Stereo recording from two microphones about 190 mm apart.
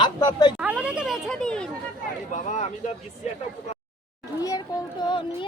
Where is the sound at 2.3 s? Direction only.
40° left (ahead or behind).